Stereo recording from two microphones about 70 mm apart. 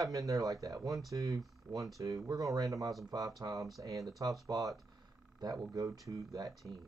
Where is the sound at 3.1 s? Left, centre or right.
Right.